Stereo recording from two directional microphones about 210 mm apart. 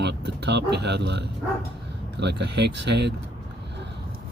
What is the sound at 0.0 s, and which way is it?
Speech, 55° right (ahead or behind).